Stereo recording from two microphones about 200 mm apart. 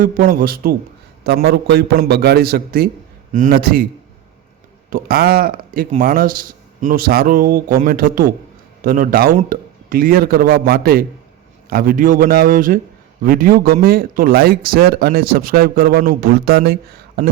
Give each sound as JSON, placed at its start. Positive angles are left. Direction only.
{"t": 0.0, "sound": "speech", "side_deg": -45}
{"t": 4.9, "sound": "speech", "side_deg": -45}